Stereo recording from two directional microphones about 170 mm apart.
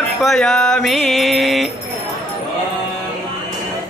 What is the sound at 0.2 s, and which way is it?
Mantra, centre (ahead or behind).